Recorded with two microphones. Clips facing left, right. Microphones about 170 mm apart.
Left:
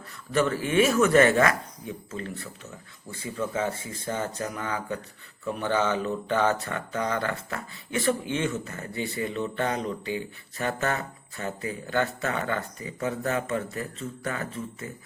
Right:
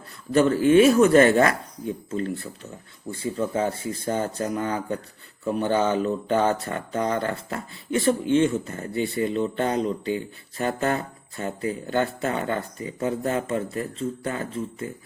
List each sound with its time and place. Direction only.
0.3 s speech: 35° right (ahead or behind)